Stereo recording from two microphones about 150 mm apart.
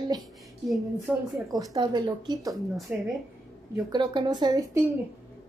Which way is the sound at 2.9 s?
10° right (ahead or behind).